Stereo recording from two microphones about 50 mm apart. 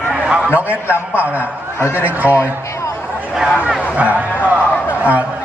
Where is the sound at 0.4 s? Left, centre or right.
Right.